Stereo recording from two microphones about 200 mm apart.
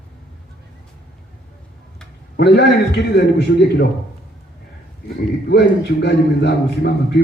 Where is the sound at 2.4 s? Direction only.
55° left (ahead or behind).